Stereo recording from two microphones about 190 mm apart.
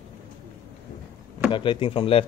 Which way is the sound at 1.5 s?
25° left (ahead or behind).